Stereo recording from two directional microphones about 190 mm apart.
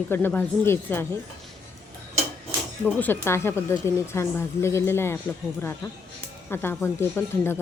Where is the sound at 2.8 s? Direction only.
10° left (ahead or behind).